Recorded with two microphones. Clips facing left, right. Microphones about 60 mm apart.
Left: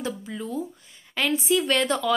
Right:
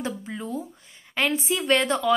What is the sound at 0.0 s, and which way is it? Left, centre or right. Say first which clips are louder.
A woman's voice: even; right.